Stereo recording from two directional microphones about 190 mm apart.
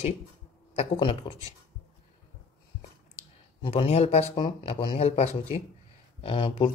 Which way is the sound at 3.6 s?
30° left (ahead or behind).